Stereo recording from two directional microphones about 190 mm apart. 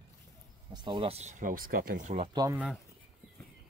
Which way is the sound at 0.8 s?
30° right (ahead or behind).